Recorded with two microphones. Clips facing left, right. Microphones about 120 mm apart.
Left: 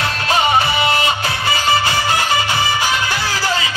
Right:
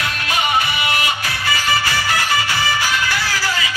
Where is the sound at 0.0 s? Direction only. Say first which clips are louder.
Left 5 dB; 30° left (ahead or behind).